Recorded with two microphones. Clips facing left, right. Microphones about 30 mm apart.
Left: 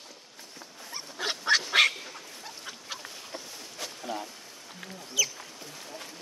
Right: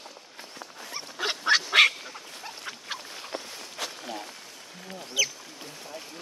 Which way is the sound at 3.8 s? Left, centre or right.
Right.